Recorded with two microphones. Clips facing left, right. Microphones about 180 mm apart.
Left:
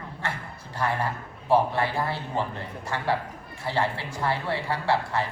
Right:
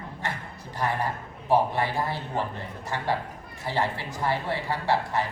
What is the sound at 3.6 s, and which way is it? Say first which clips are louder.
Speech: left 1 dB; 20° right (ahead or behind).